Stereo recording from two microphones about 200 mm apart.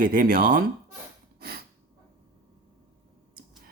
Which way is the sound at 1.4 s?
50° right (ahead or behind).